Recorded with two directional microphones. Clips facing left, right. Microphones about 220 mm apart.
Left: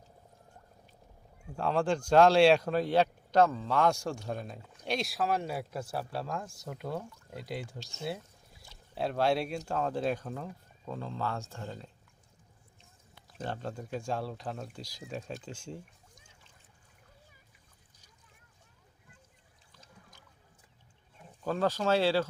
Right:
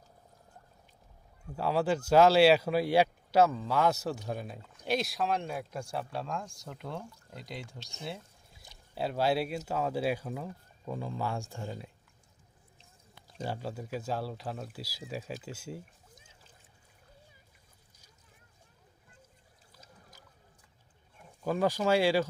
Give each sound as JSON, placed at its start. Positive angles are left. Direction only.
{"t": 1.5, "sound": "speech", "side_deg": -5}
{"t": 8.6, "sound": "a sound", "side_deg": -20}
{"t": 9.0, "sound": "speech", "side_deg": -5}
{"t": 13.4, "sound": "speech", "side_deg": -5}
{"t": 21.4, "sound": "speech", "side_deg": -10}